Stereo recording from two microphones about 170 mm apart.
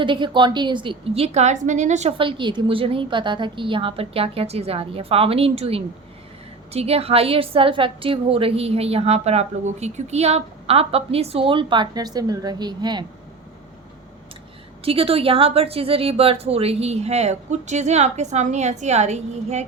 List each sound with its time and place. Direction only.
0.0 s a woman's voice: 30° right (ahead or behind)
14.8 s a woman's voice: 35° right (ahead or behind)